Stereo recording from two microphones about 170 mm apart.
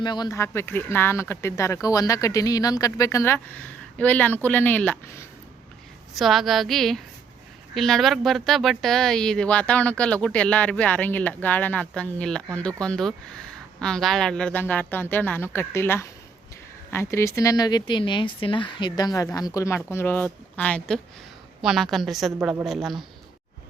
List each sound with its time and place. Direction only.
0.0 s speech: 25° left (ahead or behind)
6.1 s speech: centre (ahead or behind)